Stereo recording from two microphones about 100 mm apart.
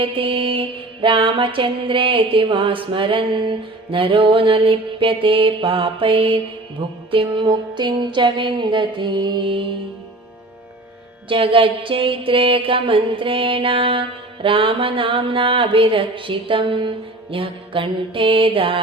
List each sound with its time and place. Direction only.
0.0 s mantra: 60° right (ahead or behind)
11.3 s mantra: 65° right (ahead or behind)